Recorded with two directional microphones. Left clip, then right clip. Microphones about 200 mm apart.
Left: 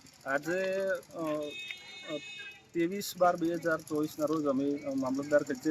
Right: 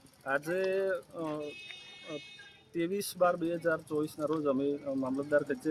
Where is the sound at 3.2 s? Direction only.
20° right (ahead or behind).